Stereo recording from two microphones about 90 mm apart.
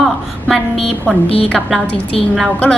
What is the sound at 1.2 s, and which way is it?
Speech, 90° left.